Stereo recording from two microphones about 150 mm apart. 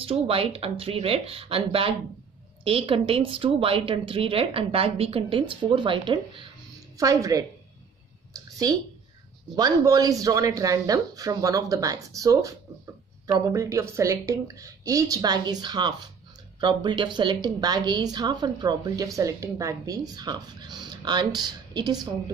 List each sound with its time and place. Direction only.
0.0 s a woman's voice: 40° right (ahead or behind)
8.3 s a sound: 25° right (ahead or behind)
9.6 s a woman's voice: 25° right (ahead or behind)